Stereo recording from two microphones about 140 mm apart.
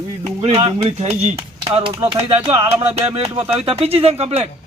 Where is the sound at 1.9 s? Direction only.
20° right (ahead or behind).